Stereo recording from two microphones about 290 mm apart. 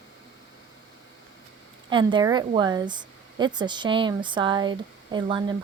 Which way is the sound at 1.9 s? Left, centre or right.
Centre.